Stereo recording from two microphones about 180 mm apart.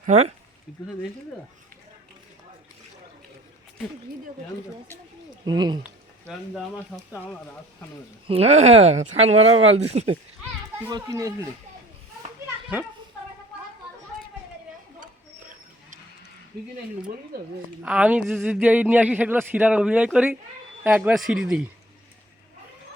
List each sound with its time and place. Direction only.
0.0 s speech: 40° right (ahead or behind)
5.5 s speech: 25° right (ahead or behind)
6.9 s speech: 10° left (ahead or behind)
8.3 s speech: 35° right (ahead or behind)
10.8 s speech: 20° right (ahead or behind)
12.7 s a man's voice: 10° right (ahead or behind)
15.0 s dog: 50° right (ahead or behind)
17.8 s a man's voice: 5° right (ahead or behind)